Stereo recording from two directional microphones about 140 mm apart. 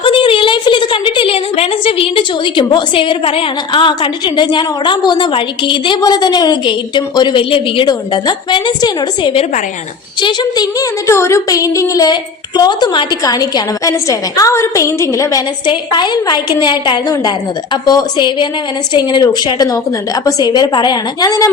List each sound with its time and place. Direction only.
0.0 s a woman's voice: 40° left (ahead or behind)